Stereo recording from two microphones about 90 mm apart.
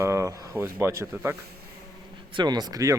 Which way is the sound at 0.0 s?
35° right (ahead or behind).